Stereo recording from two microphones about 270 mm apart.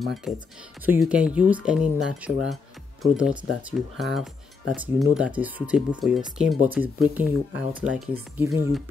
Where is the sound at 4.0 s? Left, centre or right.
Centre.